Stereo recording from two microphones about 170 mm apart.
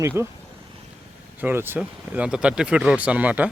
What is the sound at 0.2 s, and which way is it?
Speech, 15° right (ahead or behind).